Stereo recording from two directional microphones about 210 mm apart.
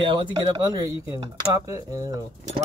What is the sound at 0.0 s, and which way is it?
Speech, 20° right (ahead or behind).